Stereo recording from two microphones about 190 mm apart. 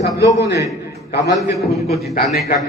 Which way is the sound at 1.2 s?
15° right (ahead or behind).